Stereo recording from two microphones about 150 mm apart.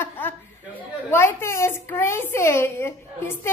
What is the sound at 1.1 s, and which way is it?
A child's voice, 15° left (ahead or behind).